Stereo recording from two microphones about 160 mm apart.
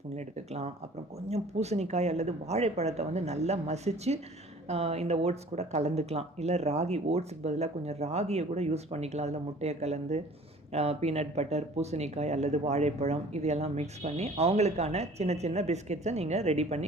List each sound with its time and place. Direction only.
0.2 s speech: 45° right (ahead or behind)